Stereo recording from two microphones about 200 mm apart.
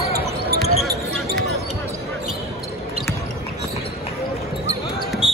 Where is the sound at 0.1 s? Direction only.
50° right (ahead or behind).